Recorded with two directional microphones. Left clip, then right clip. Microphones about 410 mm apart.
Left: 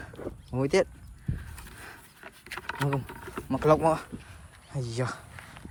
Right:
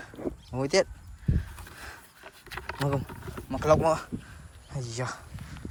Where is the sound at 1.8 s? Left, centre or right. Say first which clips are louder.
Right 1 dB; centre.